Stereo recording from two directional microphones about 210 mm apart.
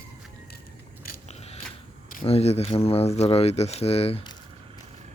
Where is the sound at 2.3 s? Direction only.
30° left (ahead or behind).